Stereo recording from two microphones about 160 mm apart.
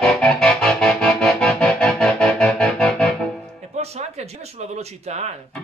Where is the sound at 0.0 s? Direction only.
5° left (ahead or behind).